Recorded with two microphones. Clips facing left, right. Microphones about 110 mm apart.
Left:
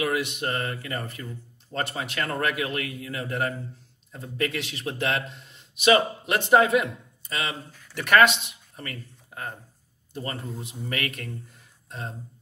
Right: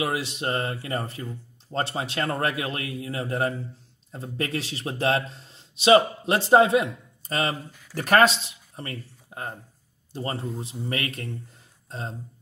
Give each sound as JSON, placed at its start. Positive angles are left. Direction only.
{"t": 0.0, "sound": "a man's voice", "side_deg": -30}